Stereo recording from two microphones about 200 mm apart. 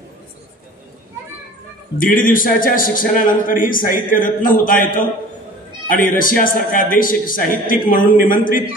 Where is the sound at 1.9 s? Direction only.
40° left (ahead or behind).